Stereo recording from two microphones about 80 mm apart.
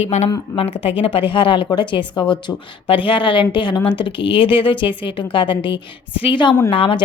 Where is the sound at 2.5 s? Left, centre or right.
Left.